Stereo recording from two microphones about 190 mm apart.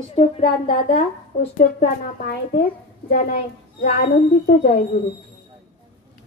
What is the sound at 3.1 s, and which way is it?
A woman's voice, 50° left (ahead or behind).